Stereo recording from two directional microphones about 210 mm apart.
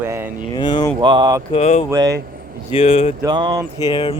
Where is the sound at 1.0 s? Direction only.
20° right (ahead or behind).